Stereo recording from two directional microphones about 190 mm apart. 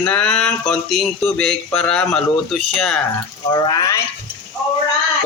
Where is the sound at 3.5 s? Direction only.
20° left (ahead or behind).